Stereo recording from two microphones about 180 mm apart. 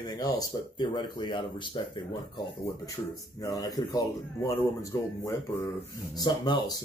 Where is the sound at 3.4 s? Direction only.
20° left (ahead or behind).